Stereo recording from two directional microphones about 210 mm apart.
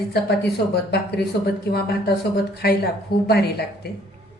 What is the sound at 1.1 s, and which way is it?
Speech, 50° left (ahead or behind).